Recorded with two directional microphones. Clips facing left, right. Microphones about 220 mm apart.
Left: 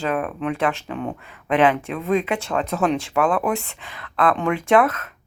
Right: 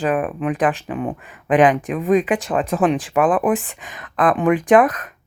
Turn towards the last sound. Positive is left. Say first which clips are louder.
# right 3 dB
turn(degrees=-15)  # may be behind; listen again after turning